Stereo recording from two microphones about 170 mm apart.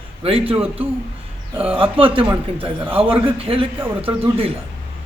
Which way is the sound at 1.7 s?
30° right (ahead or behind).